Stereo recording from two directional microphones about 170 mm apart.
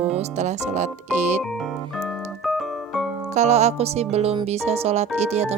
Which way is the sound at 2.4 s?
Centre (ahead or behind).